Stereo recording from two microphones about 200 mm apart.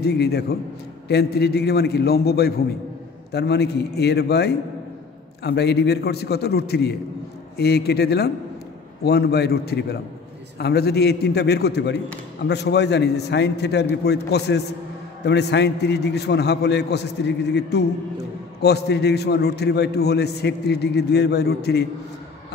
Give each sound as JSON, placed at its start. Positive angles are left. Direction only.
{"t": 0.0, "sound": "a man's voice", "side_deg": 55}